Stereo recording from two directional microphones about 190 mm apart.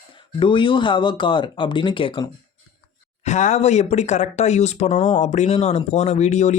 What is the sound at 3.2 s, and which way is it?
Speech, 40° left (ahead or behind).